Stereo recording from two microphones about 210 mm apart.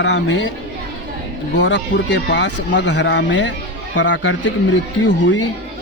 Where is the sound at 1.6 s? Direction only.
60° left (ahead or behind).